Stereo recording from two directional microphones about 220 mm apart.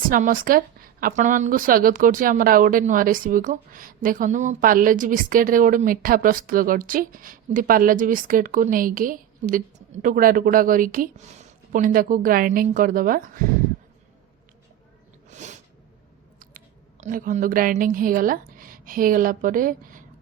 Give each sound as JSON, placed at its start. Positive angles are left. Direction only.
{"t": 0.1, "sound": "a woman's voice", "side_deg": -40}
{"t": 15.3, "sound": "a sound", "side_deg": -30}
{"t": 16.4, "sound": "a woman's voice", "side_deg": -40}